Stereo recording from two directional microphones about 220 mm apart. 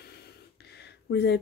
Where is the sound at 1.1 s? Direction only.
50° left (ahead or behind).